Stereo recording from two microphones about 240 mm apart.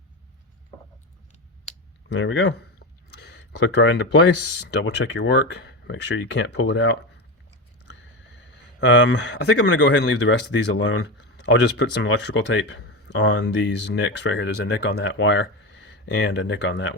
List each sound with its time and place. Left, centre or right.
2.0 s a sound: left
4.8 s speech: left
8.8 s speech: left